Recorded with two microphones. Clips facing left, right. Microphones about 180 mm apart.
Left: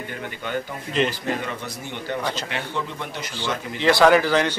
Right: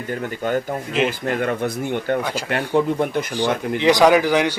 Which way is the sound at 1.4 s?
55° right (ahead or behind).